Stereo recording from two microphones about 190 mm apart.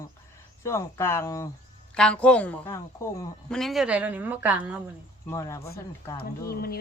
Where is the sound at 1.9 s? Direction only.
5° left (ahead or behind).